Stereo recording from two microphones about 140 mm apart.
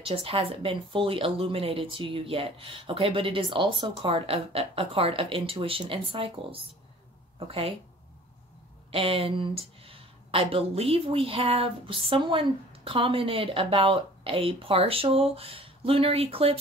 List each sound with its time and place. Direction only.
0.0 s speech: 40° right (ahead or behind)
8.9 s speech: 40° right (ahead or behind)